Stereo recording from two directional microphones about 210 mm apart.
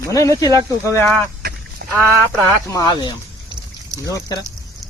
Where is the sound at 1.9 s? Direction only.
10° right (ahead or behind).